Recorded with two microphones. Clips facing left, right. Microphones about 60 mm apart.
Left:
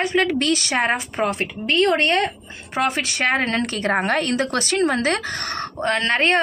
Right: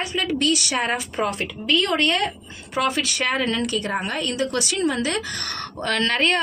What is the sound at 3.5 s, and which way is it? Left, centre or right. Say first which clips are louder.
A woman's voice: left 3 dB; left.